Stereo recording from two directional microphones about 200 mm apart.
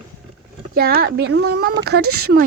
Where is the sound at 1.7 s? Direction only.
55° right (ahead or behind).